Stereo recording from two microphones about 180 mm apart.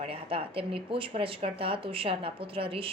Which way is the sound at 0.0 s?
30° right (ahead or behind).